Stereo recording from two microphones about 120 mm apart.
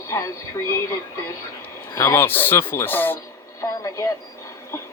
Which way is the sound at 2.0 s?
20° left (ahead or behind).